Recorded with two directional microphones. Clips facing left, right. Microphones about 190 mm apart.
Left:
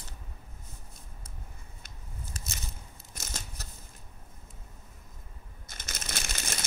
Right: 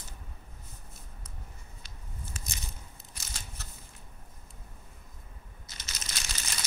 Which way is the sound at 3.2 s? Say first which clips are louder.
Left 5 dB; 45° left (ahead or behind).